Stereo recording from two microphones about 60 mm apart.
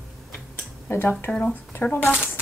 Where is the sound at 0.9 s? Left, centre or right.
Left.